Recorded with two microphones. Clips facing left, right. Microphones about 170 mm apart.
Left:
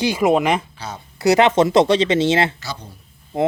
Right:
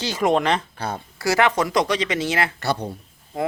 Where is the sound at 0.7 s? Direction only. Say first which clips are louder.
Right 4 dB; 55° right (ahead or behind).